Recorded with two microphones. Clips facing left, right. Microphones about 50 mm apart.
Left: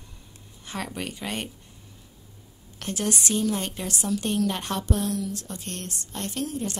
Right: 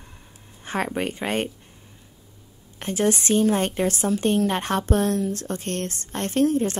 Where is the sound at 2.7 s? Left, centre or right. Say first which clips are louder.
Right 6 dB; right.